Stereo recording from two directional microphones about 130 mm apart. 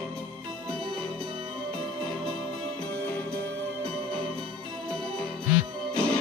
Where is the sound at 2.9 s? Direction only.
10° left (ahead or behind).